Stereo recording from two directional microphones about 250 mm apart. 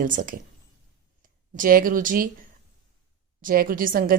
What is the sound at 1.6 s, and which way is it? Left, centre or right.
Speech, right.